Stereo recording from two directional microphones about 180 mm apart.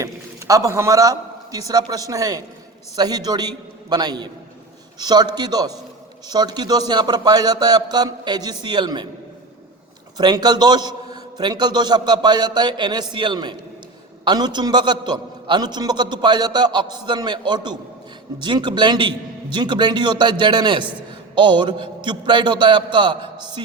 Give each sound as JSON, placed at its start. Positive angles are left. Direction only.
{"t": 0.0, "sound": "a man's voice", "side_deg": -15}
{"t": 10.2, "sound": "a man's voice", "side_deg": -25}